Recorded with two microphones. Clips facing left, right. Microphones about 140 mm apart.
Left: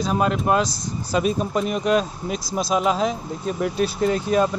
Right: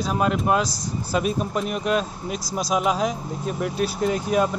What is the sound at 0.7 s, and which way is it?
Speech, 35° right (ahead or behind).